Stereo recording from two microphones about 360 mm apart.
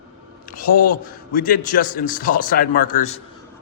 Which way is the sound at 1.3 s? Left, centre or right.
Left.